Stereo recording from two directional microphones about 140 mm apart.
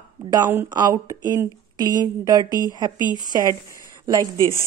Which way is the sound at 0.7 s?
25° right (ahead or behind).